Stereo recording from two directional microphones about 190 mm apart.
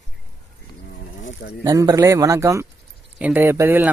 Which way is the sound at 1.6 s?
20° right (ahead or behind).